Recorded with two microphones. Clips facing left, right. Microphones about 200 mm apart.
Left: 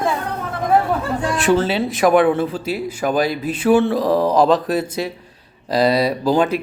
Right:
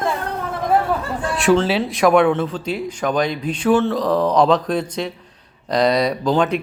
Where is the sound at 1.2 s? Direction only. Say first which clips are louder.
Right 1 dB; 5° left (ahead or behind).